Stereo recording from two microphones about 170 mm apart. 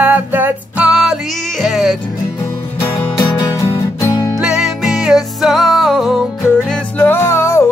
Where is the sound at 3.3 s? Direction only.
20° left (ahead or behind).